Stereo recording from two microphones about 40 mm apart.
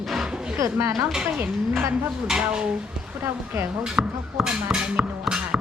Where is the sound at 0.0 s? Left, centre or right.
Centre.